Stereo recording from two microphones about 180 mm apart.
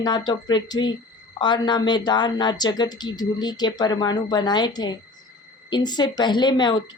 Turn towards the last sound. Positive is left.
turn(degrees=25)  # may be behind; listen again after turning